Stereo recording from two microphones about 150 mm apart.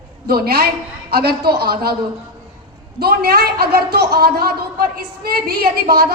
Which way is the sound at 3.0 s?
90° right.